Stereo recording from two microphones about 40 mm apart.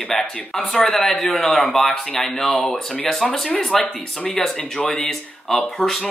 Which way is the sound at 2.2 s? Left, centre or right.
Centre.